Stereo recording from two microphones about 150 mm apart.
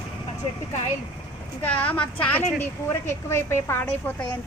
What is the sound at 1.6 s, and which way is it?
A woman's voice, 10° left (ahead or behind).